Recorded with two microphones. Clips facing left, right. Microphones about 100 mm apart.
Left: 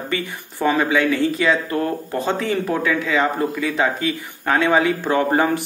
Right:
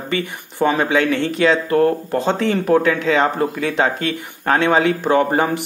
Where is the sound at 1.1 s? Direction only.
70° right (ahead or behind).